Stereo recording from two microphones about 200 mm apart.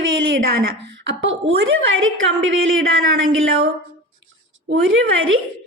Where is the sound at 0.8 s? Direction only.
65° right (ahead or behind).